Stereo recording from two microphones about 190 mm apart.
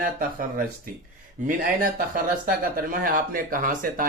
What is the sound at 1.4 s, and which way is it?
Speech, 40° right (ahead or behind).